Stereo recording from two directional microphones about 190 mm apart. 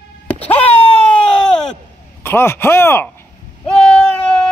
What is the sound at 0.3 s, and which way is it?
Wail, 10° left (ahead or behind).